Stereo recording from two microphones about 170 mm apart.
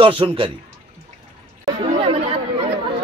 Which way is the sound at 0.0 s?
30° right (ahead or behind).